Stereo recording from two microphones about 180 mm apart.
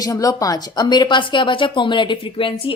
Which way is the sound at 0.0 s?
20° left (ahead or behind).